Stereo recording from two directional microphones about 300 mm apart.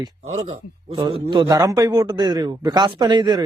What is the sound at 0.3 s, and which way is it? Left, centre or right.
A man's voice, centre.